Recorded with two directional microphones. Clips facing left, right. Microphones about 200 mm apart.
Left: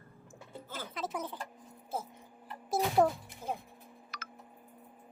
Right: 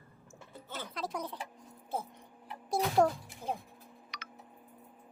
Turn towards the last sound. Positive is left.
turn(degrees=5)  # may be behind; listen again after turning